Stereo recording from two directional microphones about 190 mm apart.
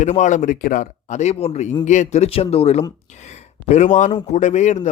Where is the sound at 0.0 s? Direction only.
40° left (ahead or behind).